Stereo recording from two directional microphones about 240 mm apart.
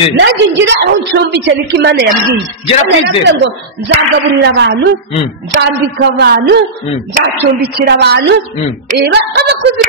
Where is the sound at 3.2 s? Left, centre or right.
Right.